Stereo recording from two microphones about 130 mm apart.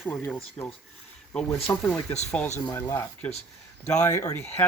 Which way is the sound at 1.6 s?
20° left (ahead or behind).